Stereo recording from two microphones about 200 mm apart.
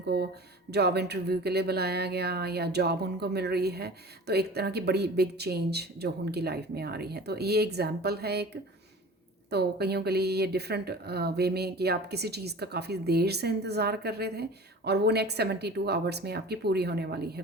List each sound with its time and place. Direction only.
0.1 s speech: 55° right (ahead or behind)
9.5 s speech: 55° right (ahead or behind)